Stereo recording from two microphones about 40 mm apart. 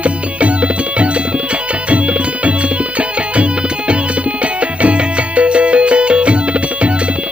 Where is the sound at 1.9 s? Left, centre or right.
Right.